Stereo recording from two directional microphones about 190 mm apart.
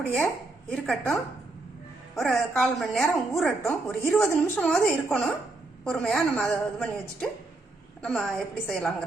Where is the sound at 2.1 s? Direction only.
Centre (ahead or behind).